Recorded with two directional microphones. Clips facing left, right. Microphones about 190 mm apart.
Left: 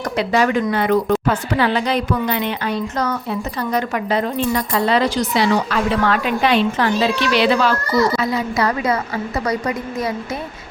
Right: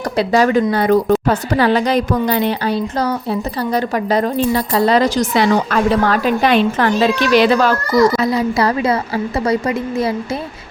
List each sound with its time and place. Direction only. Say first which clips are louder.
0.2 s a woman's voice: right 4 dB; 35° right (ahead or behind)
8.2 s a woman's voice: right 4 dB; 35° right (ahead or behind)